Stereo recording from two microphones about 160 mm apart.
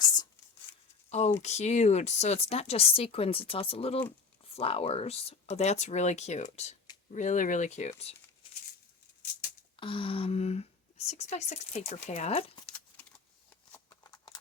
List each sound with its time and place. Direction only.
1.4 s speech: 45° left (ahead or behind)
9.7 s speech: 35° left (ahead or behind)
12.6 s a sound: 10° left (ahead or behind)